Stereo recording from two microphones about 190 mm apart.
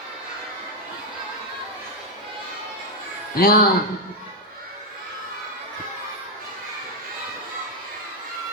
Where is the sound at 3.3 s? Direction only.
50° left (ahead or behind).